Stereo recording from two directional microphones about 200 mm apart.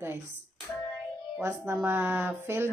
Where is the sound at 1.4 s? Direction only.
15° right (ahead or behind).